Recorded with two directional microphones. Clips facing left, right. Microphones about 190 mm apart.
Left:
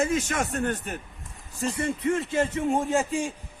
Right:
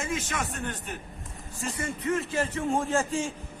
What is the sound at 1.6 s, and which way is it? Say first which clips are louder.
A man's voice: left 6 dB; 35° left (ahead or behind).